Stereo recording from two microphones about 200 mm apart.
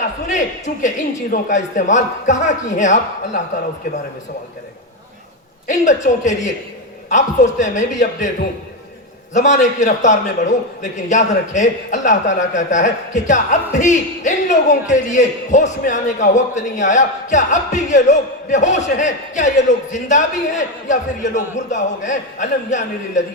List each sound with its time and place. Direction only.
0.3 s a man's voice: 40° left (ahead or behind)
5.6 s a man's voice: 35° left (ahead or behind)
9.3 s a man's voice: 40° left (ahead or behind)